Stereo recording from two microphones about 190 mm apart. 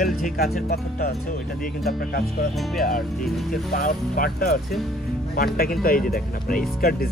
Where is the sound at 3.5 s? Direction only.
45° left (ahead or behind).